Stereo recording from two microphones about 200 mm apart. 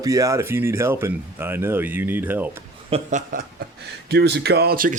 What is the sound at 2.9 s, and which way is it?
Speech, 40° right (ahead or behind).